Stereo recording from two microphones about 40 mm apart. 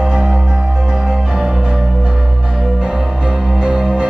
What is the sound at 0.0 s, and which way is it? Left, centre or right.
Music, centre.